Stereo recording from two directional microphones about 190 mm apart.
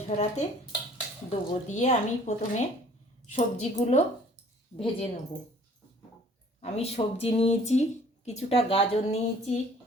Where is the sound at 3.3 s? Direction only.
35° left (ahead or behind).